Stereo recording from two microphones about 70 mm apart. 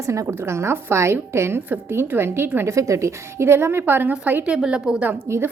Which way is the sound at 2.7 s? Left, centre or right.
Right.